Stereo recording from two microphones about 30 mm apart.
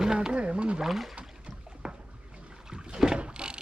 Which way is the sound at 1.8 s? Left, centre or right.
Right.